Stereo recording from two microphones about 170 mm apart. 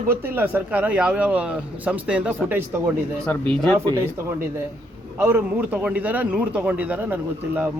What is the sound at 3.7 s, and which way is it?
Speech, 15° right (ahead or behind).